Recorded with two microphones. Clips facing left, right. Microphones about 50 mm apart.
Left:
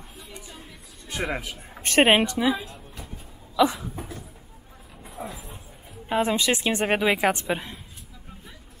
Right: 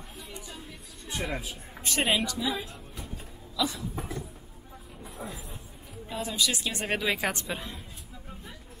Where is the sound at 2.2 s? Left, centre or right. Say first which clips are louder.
Left 7 dB; left.